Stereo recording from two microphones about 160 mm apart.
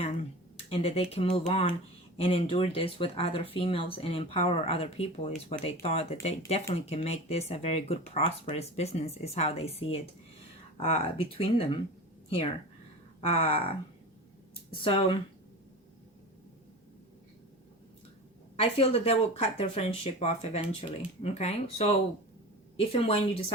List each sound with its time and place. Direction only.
0.5 s speech: 35° left (ahead or behind)
13.2 s speech: 35° left (ahead or behind)
18.5 s speech: 40° left (ahead or behind)